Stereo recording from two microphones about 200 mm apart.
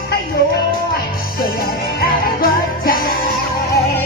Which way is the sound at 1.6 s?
50° left (ahead or behind).